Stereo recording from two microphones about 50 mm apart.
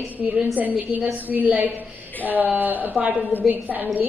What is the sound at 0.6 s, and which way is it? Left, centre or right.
A woman's voice, right.